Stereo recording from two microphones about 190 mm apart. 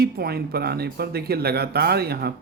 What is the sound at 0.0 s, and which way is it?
Speech, 55° right (ahead or behind).